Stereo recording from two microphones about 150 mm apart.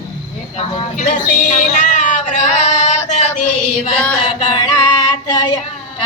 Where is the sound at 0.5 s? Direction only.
50° left (ahead or behind).